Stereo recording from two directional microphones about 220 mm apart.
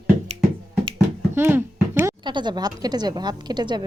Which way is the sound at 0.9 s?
10° right (ahead or behind).